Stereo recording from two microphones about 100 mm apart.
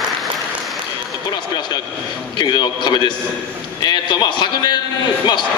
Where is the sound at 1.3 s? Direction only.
50° left (ahead or behind).